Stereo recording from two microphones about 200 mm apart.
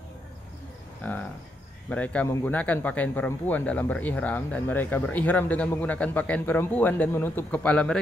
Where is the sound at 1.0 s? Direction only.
10° left (ahead or behind).